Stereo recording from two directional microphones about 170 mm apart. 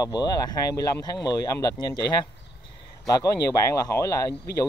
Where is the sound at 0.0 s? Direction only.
25° left (ahead or behind).